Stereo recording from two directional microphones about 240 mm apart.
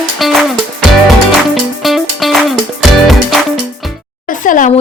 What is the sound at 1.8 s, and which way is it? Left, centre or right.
Music, centre.